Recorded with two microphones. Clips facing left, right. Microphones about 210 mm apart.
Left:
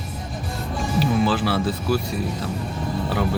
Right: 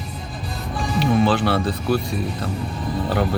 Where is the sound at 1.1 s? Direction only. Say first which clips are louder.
Right 5 dB; 60° right (ahead or behind).